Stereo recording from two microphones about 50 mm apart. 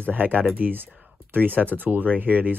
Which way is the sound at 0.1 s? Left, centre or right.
Right.